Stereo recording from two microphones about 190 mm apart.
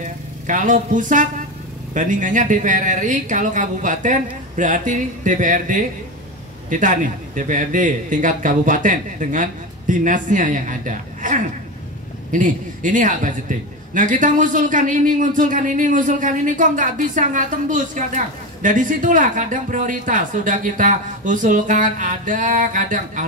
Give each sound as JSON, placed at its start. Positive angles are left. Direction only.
{"t": 0.5, "sound": "a man's voice", "side_deg": -40}